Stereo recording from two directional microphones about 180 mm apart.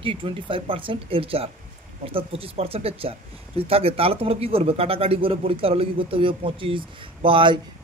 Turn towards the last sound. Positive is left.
turn(degrees=-30)  # may be behind; listen again after turning